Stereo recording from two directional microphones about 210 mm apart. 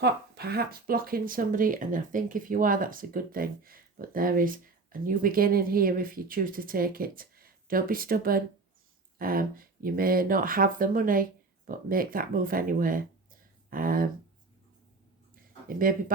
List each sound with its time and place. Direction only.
0.0 s speech: 50° right (ahead or behind)
15.8 s speech: 40° right (ahead or behind)